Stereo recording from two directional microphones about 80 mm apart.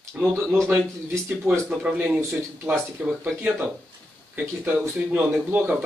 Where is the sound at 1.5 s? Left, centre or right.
Right.